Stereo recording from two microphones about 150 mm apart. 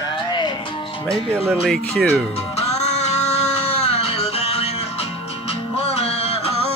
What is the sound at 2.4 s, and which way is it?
Music, 45° left (ahead or behind).